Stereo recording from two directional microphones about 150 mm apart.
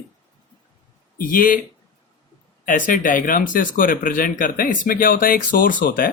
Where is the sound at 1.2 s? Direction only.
70° left (ahead or behind).